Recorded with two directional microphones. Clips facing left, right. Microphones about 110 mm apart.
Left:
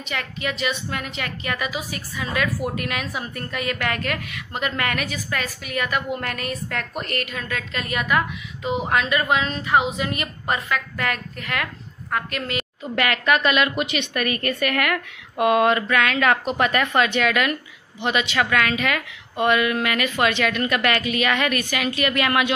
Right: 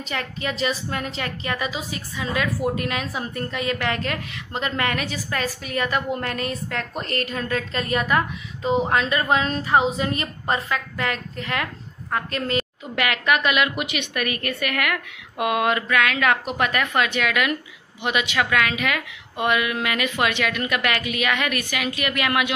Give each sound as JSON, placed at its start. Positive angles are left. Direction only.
{"t": 0.1, "sound": "a woman's voice", "side_deg": -35}
{"t": 12.9, "sound": "a woman's voice", "side_deg": -15}